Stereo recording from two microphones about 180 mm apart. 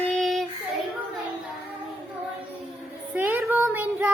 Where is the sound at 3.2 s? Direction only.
10° right (ahead or behind).